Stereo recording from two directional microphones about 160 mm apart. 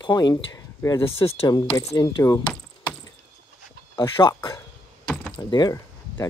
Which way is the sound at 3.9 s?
30° left (ahead or behind).